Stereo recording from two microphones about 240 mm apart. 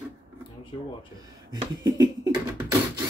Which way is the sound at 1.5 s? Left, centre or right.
Centre.